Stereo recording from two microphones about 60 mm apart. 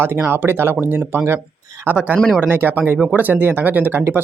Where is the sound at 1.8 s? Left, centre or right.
Right.